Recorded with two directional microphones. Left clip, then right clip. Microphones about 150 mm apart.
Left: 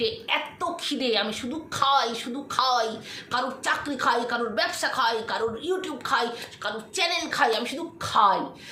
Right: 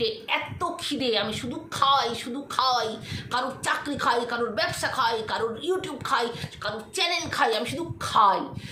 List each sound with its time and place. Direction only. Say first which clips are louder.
0.0 s a woman's voice: even; 5° right (ahead or behind)